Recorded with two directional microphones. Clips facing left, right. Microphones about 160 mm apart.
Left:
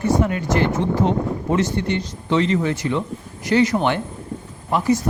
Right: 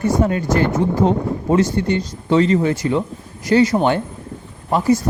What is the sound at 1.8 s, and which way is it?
Speech, 25° left (ahead or behind).